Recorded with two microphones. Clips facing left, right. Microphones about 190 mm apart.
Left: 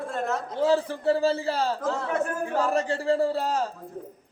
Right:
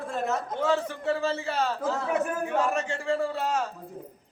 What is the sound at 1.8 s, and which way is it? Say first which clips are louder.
Speech: even; centre (ahead or behind).